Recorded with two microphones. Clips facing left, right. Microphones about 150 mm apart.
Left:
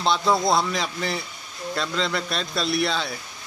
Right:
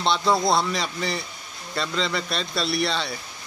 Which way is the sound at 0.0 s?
Centre (ahead or behind).